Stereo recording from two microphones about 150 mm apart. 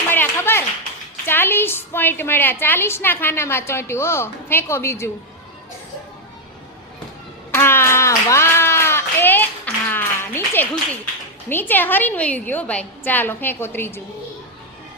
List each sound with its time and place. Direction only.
0.1 s clapping: 15° left (ahead or behind)
1.3 s a woman's voice: 15° left (ahead or behind)
7.5 s a sound: 15° left (ahead or behind)
11.4 s a woman's voice: 15° left (ahead or behind)